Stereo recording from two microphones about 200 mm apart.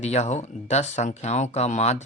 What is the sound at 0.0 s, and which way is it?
Speech, 35° left (ahead or behind).